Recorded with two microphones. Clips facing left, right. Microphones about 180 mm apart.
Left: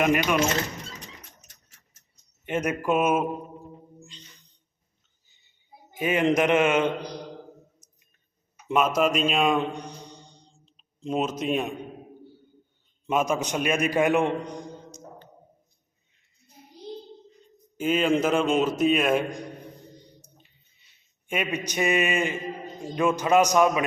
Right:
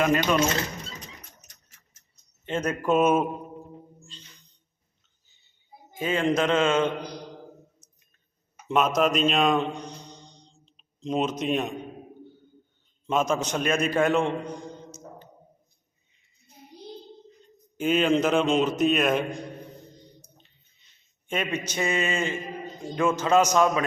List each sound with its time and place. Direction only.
0.0 s a man's voice: 15° left (ahead or behind)
2.5 s a man's voice: 15° left (ahead or behind)
6.0 s a man's voice: 15° left (ahead or behind)
8.6 s a man's voice: 5° left (ahead or behind)
9.7 s clicking: 10° left (ahead or behind)
13.1 s a man's voice: 10° left (ahead or behind)
17.7 s a man's voice: 5° left (ahead or behind)
20.8 s a man's voice: 10° left (ahead or behind)